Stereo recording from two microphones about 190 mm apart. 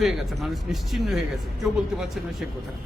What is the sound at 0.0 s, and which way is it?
A man's voice, centre (ahead or behind).